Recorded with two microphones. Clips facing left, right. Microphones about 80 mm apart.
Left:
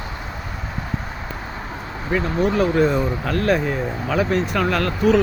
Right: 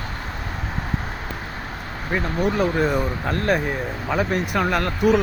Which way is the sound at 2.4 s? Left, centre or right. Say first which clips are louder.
Left 3 dB; centre.